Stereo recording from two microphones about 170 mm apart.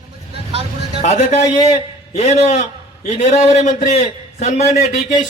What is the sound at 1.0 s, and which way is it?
A man's voice, 40° left (ahead or behind).